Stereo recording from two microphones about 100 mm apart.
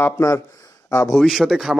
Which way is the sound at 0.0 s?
30° left (ahead or behind).